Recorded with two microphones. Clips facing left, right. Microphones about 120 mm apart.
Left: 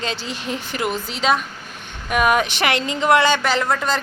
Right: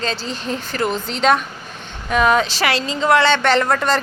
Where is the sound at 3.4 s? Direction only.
Centre (ahead or behind).